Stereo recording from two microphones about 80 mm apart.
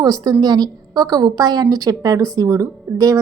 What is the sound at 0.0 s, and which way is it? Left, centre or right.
A woman's voice, right.